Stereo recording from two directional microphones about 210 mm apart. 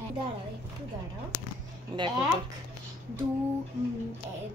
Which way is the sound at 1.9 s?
25° right (ahead or behind).